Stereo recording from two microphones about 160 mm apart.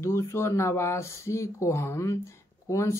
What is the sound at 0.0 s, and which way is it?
Speech, 15° left (ahead or behind).